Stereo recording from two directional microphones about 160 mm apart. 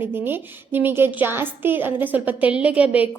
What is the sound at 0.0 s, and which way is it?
A woman's voice, 15° right (ahead or behind).